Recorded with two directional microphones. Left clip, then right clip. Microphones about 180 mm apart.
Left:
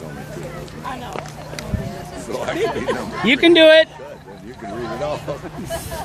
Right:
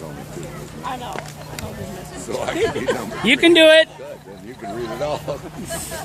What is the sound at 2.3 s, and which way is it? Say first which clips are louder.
Speech: even; 40° right (ahead or behind).